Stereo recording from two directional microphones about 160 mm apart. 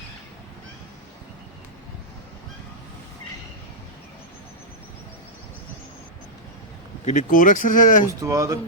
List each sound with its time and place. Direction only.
7.0 s speech: 50° left (ahead or behind)
8.2 s speech: 20° right (ahead or behind)